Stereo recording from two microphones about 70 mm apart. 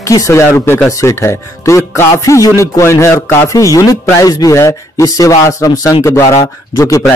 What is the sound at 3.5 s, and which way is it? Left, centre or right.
Speech, left.